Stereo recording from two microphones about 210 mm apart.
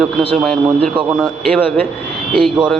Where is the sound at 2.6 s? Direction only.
5° right (ahead or behind).